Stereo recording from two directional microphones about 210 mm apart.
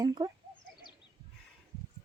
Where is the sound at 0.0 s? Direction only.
20° right (ahead or behind).